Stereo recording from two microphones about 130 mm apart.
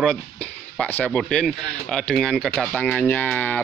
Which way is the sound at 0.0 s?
10° left (ahead or behind).